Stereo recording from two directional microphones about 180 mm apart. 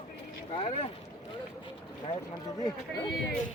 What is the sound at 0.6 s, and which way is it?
Speech, 35° left (ahead or behind).